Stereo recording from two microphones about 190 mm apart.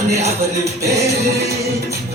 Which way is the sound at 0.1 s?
35° right (ahead or behind).